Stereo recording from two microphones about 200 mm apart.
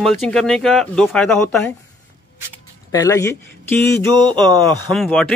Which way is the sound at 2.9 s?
15° left (ahead or behind).